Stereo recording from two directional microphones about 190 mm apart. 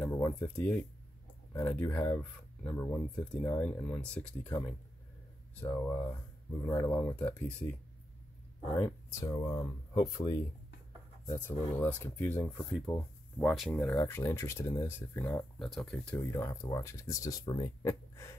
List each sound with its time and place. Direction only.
0.0 s speech: 10° left (ahead or behind)
4.5 s speech: 15° left (ahead or behind)
8.7 s speech: 15° left (ahead or behind)